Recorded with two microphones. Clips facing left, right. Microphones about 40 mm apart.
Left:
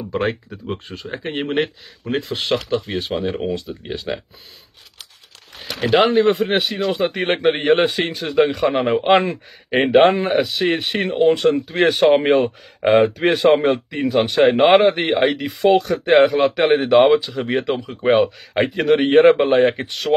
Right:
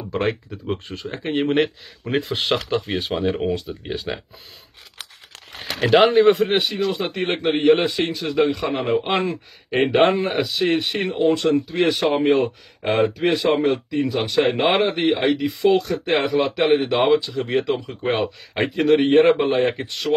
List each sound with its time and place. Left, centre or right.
0.5 s speech: centre
2.1 s speech: centre
5.9 s speech: centre
6.8 s speech: centre
12.3 s speech: centre
13.5 s speech: centre
13.8 s speech: left
14.3 s speech: centre